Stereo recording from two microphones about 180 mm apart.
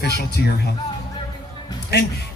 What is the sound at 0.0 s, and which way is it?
Speech, 65° left (ahead or behind).